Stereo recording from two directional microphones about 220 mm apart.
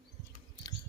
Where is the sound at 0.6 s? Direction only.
15° left (ahead or behind).